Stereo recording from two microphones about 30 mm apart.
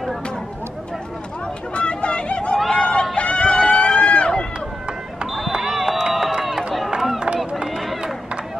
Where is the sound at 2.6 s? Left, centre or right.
Left.